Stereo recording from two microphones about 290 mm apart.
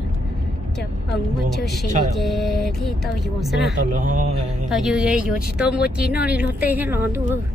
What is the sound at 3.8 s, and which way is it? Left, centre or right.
Speech, right.